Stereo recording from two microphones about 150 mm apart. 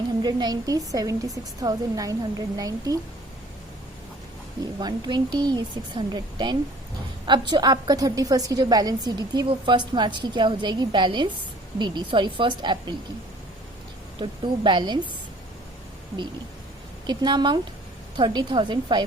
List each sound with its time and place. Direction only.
0.2 s a woman's voice: 30° right (ahead or behind)
4.8 s a woman's voice: 30° right (ahead or behind)
14.2 s a woman's voice: 30° right (ahead or behind)
17.1 s a woman's voice: 30° right (ahead or behind)